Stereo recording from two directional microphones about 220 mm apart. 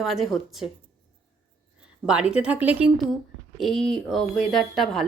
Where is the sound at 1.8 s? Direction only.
5° right (ahead or behind).